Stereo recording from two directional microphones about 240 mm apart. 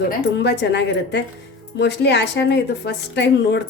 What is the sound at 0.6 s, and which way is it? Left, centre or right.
Speech, left.